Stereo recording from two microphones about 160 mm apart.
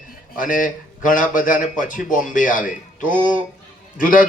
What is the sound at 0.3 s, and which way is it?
A man's voice, 55° left (ahead or behind).